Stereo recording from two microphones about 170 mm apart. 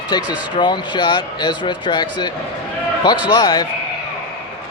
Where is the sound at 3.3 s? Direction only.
25° left (ahead or behind).